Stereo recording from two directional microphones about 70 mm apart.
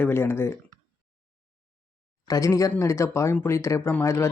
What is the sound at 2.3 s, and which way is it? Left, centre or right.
Speech, left.